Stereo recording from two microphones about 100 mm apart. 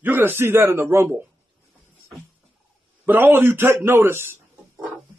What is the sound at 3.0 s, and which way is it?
A man's voice, 20° right (ahead or behind).